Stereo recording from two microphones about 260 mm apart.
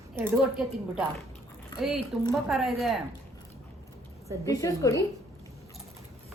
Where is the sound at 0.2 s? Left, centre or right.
Centre.